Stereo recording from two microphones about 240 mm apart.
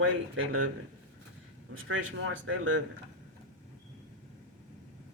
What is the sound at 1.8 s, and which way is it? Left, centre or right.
Speech, right.